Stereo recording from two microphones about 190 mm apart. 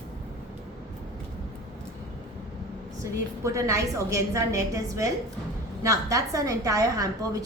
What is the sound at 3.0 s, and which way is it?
A woman's voice, 15° right (ahead or behind).